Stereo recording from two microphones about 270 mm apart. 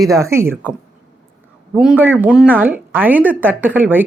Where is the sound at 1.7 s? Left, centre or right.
Centre.